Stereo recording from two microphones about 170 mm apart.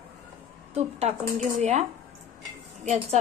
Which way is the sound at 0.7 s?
40° right (ahead or behind).